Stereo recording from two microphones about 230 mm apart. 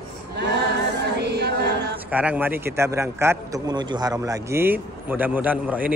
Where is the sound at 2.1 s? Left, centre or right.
Centre.